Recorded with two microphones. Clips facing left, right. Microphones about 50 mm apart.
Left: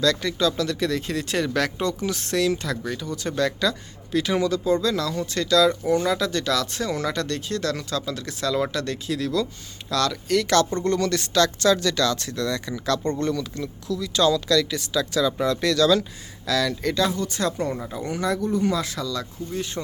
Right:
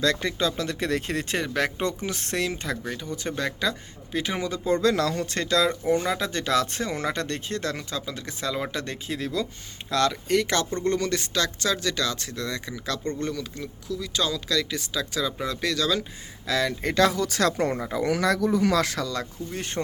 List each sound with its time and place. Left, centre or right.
0.0 s speech: right
1.4 s speech: right
4.7 s speech: right; by 16.0 s centre
16.5 s speech: right
16.9 s speech: right
17.8 s speech: right